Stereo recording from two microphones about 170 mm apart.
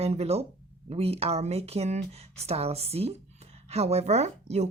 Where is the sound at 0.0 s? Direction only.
40° right (ahead or behind).